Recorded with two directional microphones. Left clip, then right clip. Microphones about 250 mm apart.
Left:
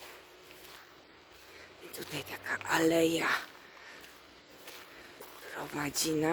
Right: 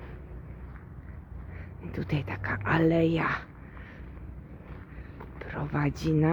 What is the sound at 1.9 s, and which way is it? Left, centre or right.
Speech, centre.